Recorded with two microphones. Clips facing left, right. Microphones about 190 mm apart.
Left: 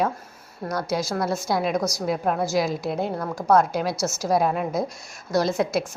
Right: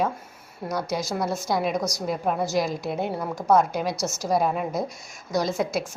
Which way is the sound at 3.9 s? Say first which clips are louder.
Left 2 dB; 15° right (ahead or behind).